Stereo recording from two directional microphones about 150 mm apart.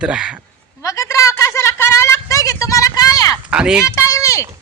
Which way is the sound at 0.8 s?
20° left (ahead or behind).